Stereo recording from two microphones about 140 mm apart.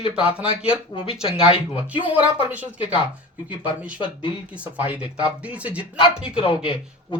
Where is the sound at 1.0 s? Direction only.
40° left (ahead or behind).